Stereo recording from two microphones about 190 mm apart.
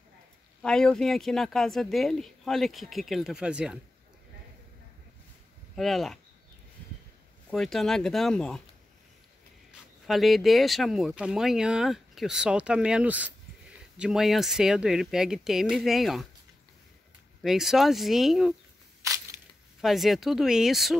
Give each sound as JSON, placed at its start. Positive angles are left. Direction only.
{"t": 0.6, "sound": "speech", "side_deg": 5}
{"t": 5.8, "sound": "speech", "side_deg": 0}
{"t": 7.5, "sound": "speech", "side_deg": 0}
{"t": 9.7, "sound": "speech", "side_deg": 0}
{"t": 17.4, "sound": "speech", "side_deg": 0}
{"t": 19.0, "sound": "crushing", "side_deg": -15}
{"t": 19.8, "sound": "speech", "side_deg": 0}